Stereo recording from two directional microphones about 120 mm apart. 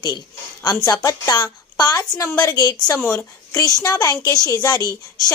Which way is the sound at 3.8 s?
30° left (ahead or behind).